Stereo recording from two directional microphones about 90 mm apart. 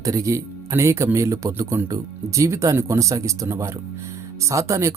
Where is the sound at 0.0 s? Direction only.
40° right (ahead or behind).